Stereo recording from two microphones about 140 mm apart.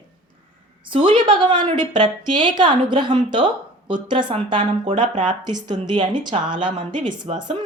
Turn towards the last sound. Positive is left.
turn(degrees=-30)  # may be behind; listen again after turning